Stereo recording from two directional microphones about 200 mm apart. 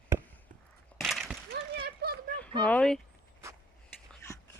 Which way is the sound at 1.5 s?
50° right (ahead or behind).